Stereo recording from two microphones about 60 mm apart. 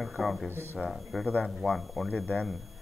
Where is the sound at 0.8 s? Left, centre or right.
Centre.